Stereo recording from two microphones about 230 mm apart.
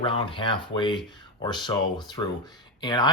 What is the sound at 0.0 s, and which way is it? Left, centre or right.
Speech, left.